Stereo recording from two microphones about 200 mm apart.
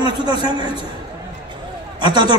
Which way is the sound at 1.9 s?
20° right (ahead or behind).